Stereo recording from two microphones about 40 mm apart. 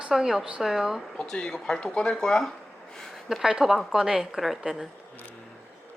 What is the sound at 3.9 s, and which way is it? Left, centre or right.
Speech, centre.